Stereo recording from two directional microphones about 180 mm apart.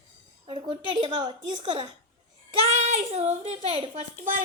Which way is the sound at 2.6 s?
40° right (ahead or behind).